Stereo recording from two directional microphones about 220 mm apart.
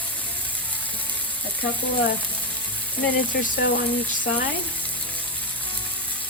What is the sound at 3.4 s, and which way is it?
Speech, 40° left (ahead or behind).